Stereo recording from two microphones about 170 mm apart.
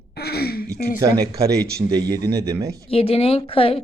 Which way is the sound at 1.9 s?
25° right (ahead or behind).